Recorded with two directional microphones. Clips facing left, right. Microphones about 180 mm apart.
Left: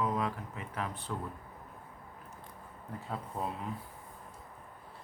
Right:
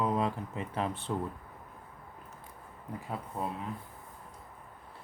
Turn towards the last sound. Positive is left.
turn(degrees=-5)  # may be behind; listen again after turning